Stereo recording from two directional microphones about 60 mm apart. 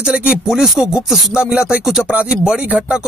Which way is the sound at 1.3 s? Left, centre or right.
Centre.